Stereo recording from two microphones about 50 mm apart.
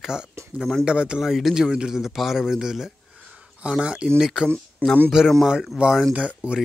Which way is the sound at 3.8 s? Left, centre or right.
Right.